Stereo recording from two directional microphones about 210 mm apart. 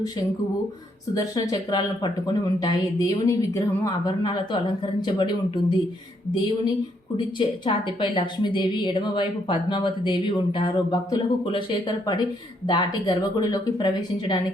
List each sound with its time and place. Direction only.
1.1 s a woman's voice: 15° left (ahead or behind)
7.3 s a woman's voice: 20° left (ahead or behind)